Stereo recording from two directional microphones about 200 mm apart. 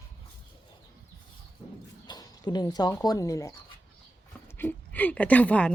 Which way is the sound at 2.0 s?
20° left (ahead or behind).